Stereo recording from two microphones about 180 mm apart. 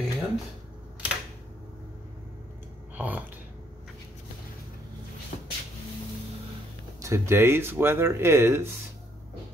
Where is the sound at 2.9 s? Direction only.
10° right (ahead or behind).